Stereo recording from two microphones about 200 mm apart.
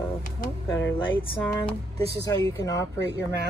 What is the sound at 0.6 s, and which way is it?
Speech, 20° left (ahead or behind).